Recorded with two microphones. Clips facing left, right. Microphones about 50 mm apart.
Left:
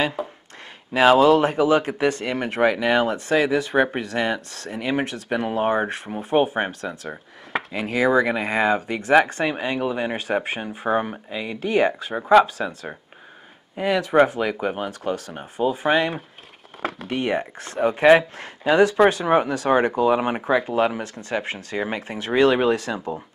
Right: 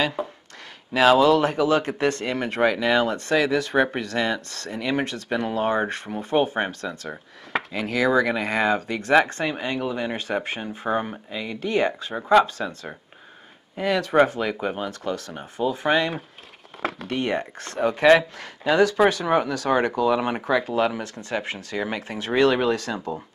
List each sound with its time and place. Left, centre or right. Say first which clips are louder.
0.9 s speech: left 2 dB; centre
13.7 s speech: left 1 dB; centre; by 21.7 s left
21.7 s speech: left 1 dB; centre